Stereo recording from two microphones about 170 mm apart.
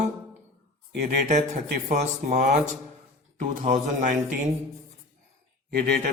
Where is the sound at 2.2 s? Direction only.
45° right (ahead or behind).